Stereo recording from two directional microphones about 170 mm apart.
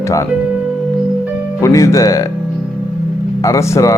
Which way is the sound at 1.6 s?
20° left (ahead or behind).